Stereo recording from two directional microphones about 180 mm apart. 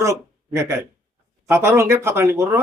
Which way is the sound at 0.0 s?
15° right (ahead or behind).